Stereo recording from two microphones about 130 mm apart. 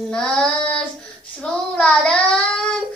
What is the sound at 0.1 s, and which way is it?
Child singing, 5° left (ahead or behind).